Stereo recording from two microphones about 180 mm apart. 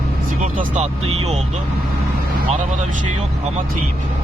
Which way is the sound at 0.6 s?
40° right (ahead or behind).